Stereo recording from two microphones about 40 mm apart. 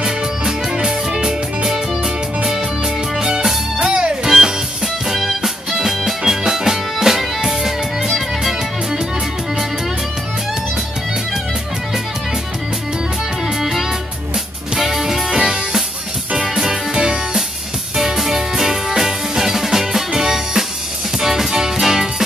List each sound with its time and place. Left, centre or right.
0.0 s music: centre
3.9 s music: right
4.3 s music: centre
13.6 s music: centre
16.9 s music: centre
17.9 s music: centre